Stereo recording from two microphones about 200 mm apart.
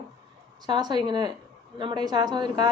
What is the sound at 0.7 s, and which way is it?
A woman's voice, 20° right (ahead or behind).